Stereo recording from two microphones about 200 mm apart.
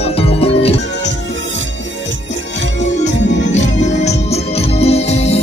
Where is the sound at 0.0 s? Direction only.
30° left (ahead or behind).